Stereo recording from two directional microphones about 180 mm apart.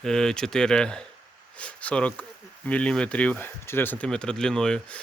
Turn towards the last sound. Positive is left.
turn(degrees=5)  # may be behind; listen again after turning